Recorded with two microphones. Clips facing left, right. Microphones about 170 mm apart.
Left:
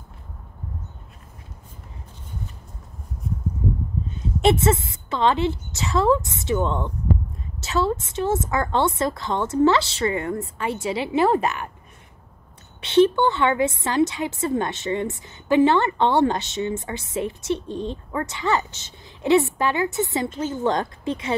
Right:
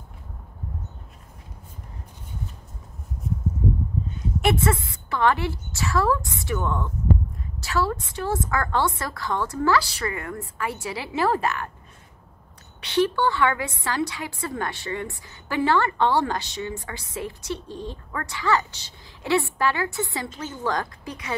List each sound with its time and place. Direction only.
4.4 s a woman's voice: 25° left (ahead or behind)
12.8 s a woman's voice: 25° left (ahead or behind)